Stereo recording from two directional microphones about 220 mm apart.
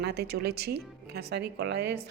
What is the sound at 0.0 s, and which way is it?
A woman's voice, 45° right (ahead or behind).